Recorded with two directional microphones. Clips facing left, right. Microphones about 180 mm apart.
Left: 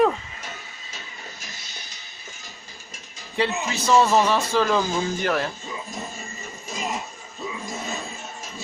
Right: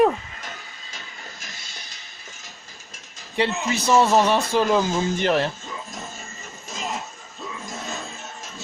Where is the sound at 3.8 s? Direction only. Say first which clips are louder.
Right 1 dB; 15° right (ahead or behind).